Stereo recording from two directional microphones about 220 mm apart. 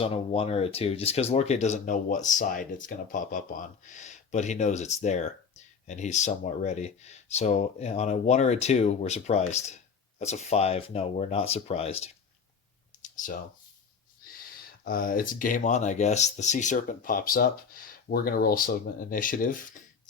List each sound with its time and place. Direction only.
0.0 s speech: 25° left (ahead or behind)
13.0 s a sound: 35° left (ahead or behind)
14.8 s speech: 40° left (ahead or behind)